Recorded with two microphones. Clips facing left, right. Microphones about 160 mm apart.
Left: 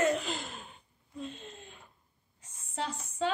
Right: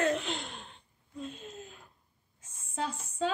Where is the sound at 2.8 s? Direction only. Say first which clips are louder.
Even; 10° right (ahead or behind).